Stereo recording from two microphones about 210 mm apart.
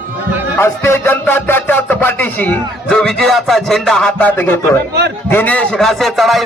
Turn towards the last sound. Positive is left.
turn(degrees=0)  # may be behind; listen again after turning